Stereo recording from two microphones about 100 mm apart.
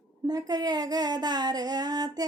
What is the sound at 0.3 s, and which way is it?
Speech, 40° right (ahead or behind).